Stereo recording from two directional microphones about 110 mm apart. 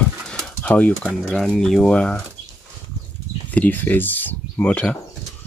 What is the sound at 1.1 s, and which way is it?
Speech, centre (ahead or behind).